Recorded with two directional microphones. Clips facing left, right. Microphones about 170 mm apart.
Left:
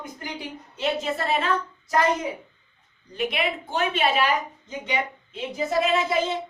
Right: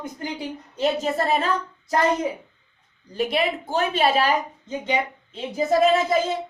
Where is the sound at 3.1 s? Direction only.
35° right (ahead or behind).